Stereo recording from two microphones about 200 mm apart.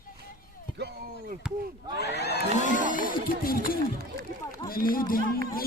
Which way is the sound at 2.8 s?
45° left (ahead or behind).